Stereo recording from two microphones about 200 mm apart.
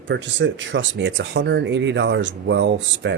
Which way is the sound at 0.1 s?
65° right (ahead or behind).